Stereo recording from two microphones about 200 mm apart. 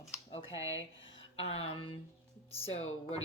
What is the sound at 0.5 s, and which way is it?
Speech, 65° left (ahead or behind).